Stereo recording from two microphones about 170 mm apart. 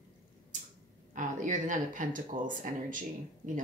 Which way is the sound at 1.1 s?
45° right (ahead or behind).